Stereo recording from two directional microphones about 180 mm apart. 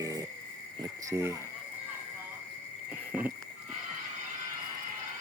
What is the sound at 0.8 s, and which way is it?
Cricket, 15° right (ahead or behind).